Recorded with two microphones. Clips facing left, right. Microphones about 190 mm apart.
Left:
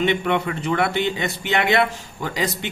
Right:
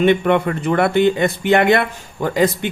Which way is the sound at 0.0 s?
50° right (ahead or behind).